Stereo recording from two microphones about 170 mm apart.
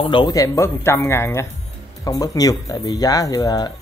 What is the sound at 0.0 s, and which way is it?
Speech, 25° left (ahead or behind).